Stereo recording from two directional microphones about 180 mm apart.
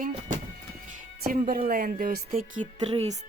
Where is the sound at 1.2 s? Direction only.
55° right (ahead or behind); by 3.1 s 35° right (ahead or behind).